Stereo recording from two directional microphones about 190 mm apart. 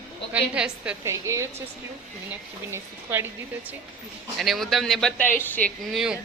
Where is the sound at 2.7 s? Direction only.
10° right (ahead or behind).